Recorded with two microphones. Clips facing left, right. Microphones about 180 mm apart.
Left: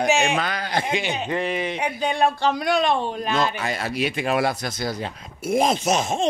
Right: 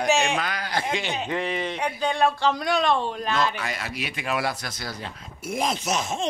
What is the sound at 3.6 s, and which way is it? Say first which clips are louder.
Speech: left 7 dB; 30° left (ahead or behind).